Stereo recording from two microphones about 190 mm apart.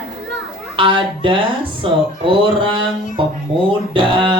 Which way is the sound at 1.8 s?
25° right (ahead or behind).